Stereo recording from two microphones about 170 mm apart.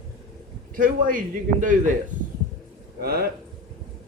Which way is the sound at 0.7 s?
55° right (ahead or behind).